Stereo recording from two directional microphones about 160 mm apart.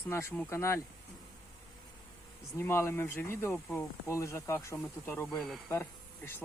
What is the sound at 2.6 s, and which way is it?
Speech, 15° left (ahead or behind).